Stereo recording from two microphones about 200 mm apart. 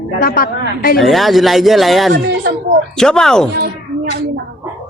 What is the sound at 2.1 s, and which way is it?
Speech, 55° right (ahead or behind).